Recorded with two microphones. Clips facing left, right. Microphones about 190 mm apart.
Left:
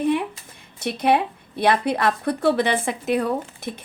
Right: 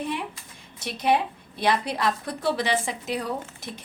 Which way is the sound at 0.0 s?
60° left (ahead or behind).